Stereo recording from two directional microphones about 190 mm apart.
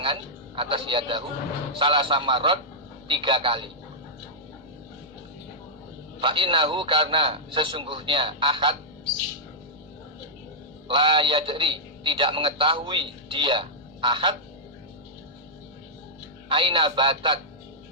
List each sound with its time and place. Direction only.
0.0 s a man's voice: 25° right (ahead or behind)
6.1 s a man's voice: 25° right (ahead or behind)
10.8 s a man's voice: 25° right (ahead or behind)
16.5 s a man's voice: 25° right (ahead or behind)